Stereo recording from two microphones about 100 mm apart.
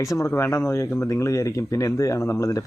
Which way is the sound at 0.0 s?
30° left (ahead or behind).